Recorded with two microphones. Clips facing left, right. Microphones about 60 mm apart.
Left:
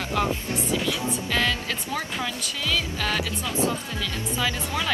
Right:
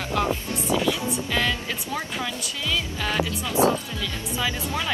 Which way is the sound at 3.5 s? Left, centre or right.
Right.